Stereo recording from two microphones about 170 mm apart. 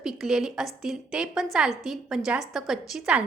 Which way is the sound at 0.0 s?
5° right (ahead or behind).